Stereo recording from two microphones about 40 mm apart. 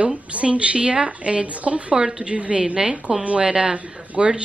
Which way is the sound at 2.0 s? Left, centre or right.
Centre.